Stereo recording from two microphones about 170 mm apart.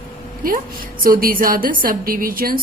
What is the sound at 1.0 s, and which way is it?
Speech, 55° right (ahead or behind).